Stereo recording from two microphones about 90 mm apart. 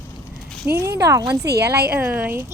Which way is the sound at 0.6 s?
30° right (ahead or behind).